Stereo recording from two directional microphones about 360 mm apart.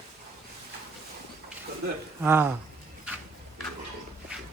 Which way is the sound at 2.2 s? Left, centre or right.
Centre.